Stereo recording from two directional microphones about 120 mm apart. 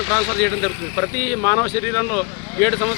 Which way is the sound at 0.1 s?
10° left (ahead or behind).